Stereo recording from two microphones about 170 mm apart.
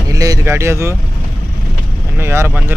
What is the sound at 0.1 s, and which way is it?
Speech, 20° right (ahead or behind).